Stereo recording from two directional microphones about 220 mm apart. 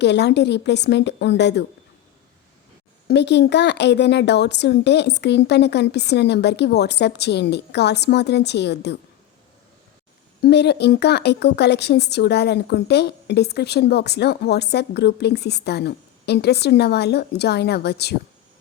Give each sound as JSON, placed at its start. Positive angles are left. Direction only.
{"t": 0.0, "sound": "a woman's voice", "side_deg": 50}
{"t": 3.1, "sound": "a woman's voice", "side_deg": 50}
{"t": 10.4, "sound": "a woman's voice", "side_deg": 50}